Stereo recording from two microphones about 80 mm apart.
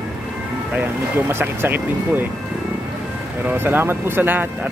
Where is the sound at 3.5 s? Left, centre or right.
Right.